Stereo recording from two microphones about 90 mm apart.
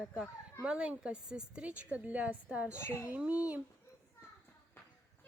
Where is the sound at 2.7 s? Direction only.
25° left (ahead or behind).